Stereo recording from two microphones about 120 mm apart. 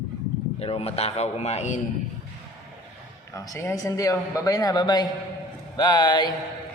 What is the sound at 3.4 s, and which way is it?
Speech, 25° left (ahead or behind).